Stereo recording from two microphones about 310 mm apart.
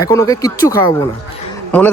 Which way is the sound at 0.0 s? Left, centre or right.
Centre.